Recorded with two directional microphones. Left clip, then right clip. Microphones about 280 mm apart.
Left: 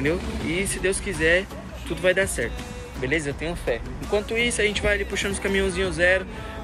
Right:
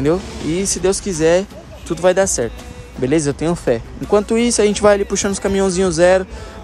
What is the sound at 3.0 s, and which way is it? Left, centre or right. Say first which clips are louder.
Speech: right 9 dB; right.